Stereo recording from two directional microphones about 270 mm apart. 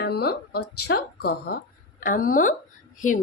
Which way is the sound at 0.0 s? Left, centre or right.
Left.